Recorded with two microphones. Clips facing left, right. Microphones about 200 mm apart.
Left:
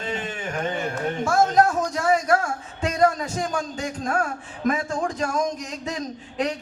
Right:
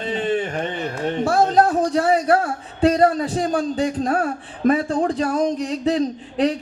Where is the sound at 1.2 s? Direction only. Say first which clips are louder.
Right 2 dB; 30° right (ahead or behind).